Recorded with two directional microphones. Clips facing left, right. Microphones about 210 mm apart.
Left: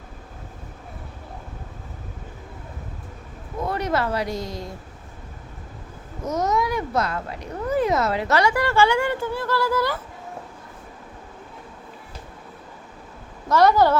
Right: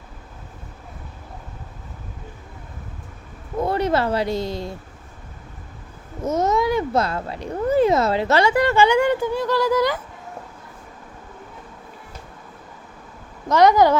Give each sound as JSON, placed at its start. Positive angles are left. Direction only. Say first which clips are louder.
{"t": 3.7, "sound": "speech", "louder": "right 3 dB", "side_deg": -30}
{"t": 6.2, "sound": "speech", "louder": "right 3 dB", "side_deg": -25}
{"t": 13.5, "sound": "a woman's voice", "louder": "right 2 dB", "side_deg": -15}